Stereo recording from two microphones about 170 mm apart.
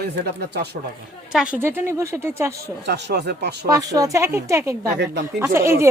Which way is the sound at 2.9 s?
85° right.